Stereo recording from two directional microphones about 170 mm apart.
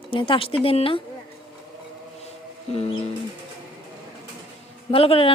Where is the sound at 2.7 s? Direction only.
35° left (ahead or behind).